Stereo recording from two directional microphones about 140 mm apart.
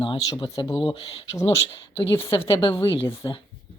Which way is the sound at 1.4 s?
20° left (ahead or behind).